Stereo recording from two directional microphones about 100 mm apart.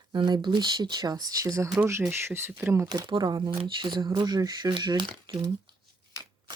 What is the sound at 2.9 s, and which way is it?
Speech, 45° right (ahead or behind).